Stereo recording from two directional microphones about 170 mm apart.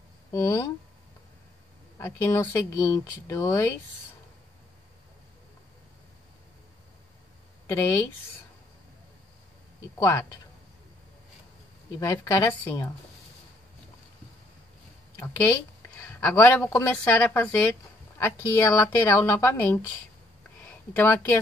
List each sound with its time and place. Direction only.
0.3 s speech: 15° left (ahead or behind)
2.0 s speech: 15° left (ahead or behind)
7.6 s speech: 15° left (ahead or behind)
9.9 s speech: 20° left (ahead or behind)
12.0 s speech: 20° left (ahead or behind)
15.1 s a man's voice: 15° left (ahead or behind)